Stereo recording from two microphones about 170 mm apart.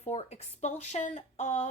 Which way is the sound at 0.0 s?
40° left (ahead or behind).